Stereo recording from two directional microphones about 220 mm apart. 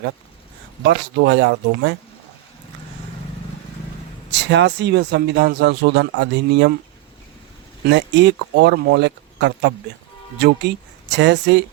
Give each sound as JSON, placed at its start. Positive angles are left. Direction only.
{"t": 0.9, "sound": "speech", "side_deg": -50}
{"t": 4.3, "sound": "speech", "side_deg": -50}
{"t": 7.9, "sound": "speech", "side_deg": -50}